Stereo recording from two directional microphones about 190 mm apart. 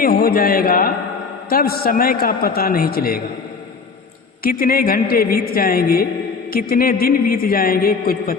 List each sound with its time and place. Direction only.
0.0 s a man's voice: 50° left (ahead or behind)
4.4 s a man's voice: 50° left (ahead or behind)